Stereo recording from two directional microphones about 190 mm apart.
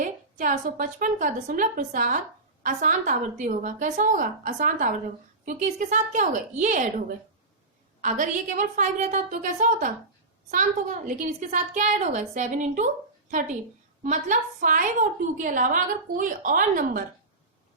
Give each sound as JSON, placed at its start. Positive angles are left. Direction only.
{"t": 0.0, "sound": "a woman's voice", "side_deg": -45}
{"t": 8.0, "sound": "a woman's voice", "side_deg": -40}
{"t": 14.0, "sound": "a woman's voice", "side_deg": -40}